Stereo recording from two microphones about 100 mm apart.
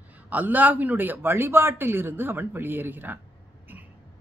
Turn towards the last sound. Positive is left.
turn(degrees=-20)  # may be behind; listen again after turning